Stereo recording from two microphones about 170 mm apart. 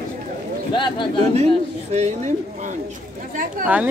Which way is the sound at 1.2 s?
40° right (ahead or behind).